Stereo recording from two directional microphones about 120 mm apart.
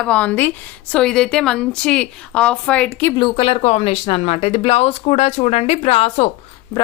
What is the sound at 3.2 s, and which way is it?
Speech, 50° left (ahead or behind).